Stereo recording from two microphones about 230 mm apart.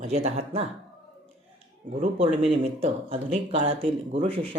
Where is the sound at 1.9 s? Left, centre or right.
Right.